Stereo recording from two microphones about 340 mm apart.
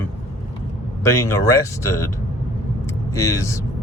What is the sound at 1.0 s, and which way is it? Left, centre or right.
Speech, centre.